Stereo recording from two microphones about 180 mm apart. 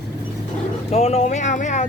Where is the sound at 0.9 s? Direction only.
40° left (ahead or behind).